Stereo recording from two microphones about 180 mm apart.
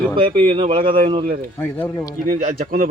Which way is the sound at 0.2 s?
30° right (ahead or behind).